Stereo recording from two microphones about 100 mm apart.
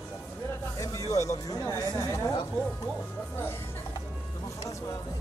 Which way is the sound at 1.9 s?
30° left (ahead or behind).